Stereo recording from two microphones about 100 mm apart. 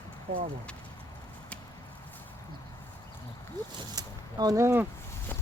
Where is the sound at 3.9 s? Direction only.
40° right (ahead or behind).